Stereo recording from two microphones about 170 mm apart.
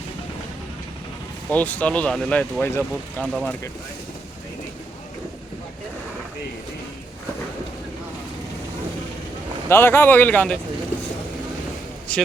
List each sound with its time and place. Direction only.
1.5 s speech: 10° left (ahead or behind)
9.6 s speech: 15° left (ahead or behind)
12.1 s speech: 5° left (ahead or behind)